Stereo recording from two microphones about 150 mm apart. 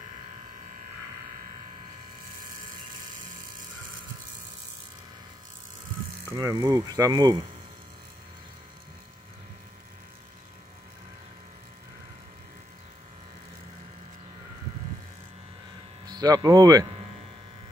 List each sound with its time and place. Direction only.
6.2 s speech: 20° right (ahead or behind)
16.1 s speech: 25° right (ahead or behind)